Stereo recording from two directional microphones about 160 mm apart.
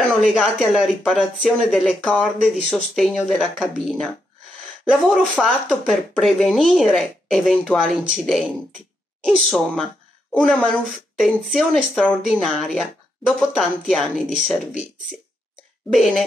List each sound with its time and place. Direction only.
0.3 s speech: centre (ahead or behind)
15.9 s speech: centre (ahead or behind)